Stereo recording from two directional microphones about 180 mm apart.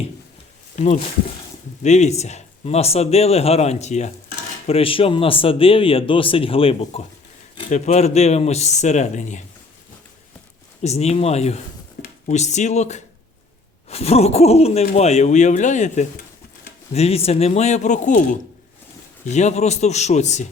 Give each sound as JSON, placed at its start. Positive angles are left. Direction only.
{"t": 1.8, "sound": "a man's voice", "side_deg": 40}
{"t": 10.8, "sound": "a man's voice", "side_deg": 35}